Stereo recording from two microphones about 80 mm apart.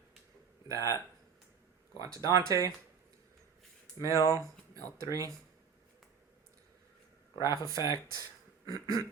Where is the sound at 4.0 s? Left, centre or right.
Left.